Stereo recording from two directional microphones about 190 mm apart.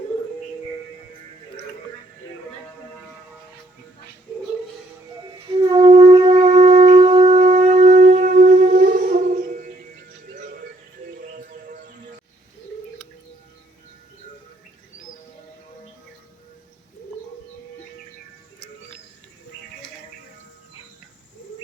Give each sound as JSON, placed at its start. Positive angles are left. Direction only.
{"t": 5.7, "sound": "shofar", "side_deg": -25}